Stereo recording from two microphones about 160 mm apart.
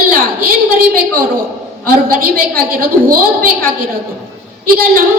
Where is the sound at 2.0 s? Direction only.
70° right (ahead or behind).